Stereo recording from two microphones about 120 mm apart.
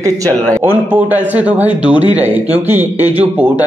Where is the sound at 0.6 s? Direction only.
15° right (ahead or behind).